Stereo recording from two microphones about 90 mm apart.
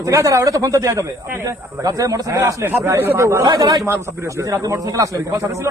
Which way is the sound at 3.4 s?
50° right (ahead or behind).